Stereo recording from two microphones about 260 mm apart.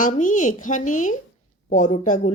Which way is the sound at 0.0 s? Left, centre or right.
Left.